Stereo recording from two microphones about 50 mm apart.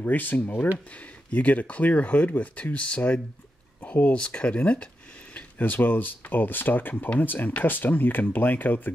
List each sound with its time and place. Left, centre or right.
0.0 s speech: left
5.3 s speech: left